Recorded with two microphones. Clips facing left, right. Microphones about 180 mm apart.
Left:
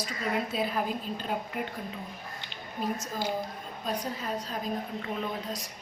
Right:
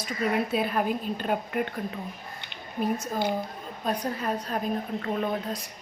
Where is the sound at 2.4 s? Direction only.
55° right (ahead or behind).